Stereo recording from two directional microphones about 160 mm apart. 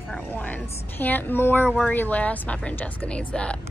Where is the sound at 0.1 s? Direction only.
5° left (ahead or behind).